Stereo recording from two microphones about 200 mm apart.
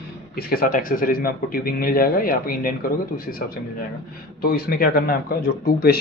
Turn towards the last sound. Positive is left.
turn(degrees=50)  # may be behind; listen again after turning